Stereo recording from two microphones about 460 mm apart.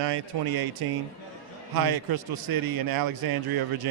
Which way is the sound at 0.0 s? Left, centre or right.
Right.